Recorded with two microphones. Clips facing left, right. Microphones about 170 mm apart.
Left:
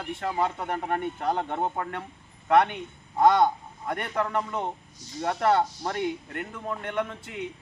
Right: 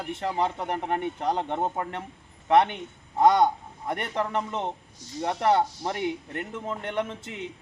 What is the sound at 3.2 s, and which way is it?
Speech, 20° right (ahead or behind).